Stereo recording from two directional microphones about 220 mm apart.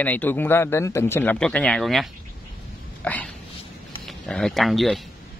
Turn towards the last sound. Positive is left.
turn(degrees=0)  # may be behind; listen again after turning